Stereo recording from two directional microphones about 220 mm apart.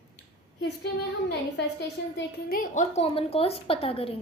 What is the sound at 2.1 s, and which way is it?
A child's voice, 40° left (ahead or behind).